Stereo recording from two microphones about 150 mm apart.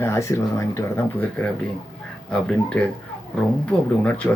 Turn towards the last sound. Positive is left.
turn(degrees=10)  # may be behind; listen again after turning